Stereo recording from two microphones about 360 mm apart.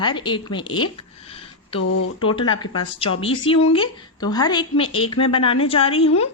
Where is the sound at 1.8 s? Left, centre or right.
Left.